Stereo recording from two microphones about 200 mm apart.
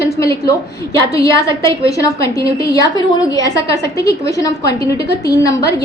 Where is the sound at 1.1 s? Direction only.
15° left (ahead or behind).